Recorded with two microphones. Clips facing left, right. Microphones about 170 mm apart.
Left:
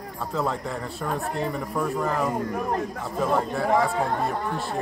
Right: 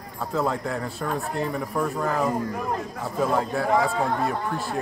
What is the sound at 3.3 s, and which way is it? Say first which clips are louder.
Speech: left 2 dB; 5° right (ahead or behind).